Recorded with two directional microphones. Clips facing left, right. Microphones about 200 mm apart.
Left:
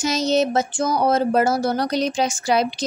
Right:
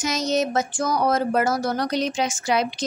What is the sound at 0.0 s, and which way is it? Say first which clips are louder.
Speech: left 3 dB; 30° left (ahead or behind).